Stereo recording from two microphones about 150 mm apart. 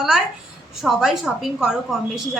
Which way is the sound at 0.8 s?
Centre (ahead or behind).